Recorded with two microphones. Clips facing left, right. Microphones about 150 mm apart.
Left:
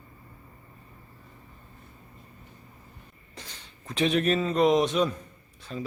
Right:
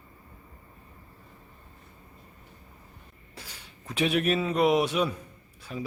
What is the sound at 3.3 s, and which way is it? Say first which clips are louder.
Speech: left 1 dB; 10° right (ahead or behind).